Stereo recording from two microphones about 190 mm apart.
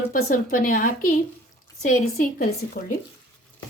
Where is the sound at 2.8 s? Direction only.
55° left (ahead or behind).